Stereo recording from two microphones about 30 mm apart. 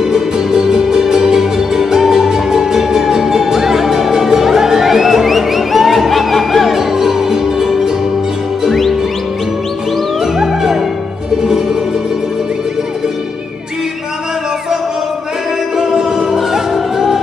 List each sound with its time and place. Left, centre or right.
0.0 s music: centre
6.7 s music: centre
10.2 s music: centre
15.8 s music: right
16.5 s music: centre